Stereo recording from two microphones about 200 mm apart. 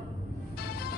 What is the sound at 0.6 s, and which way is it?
Music, 50° left (ahead or behind).